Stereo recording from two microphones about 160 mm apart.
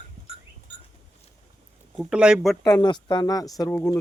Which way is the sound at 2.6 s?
25° left (ahead or behind).